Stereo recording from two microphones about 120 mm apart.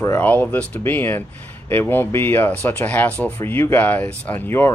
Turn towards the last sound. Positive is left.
turn(degrees=20)  # may be behind; listen again after turning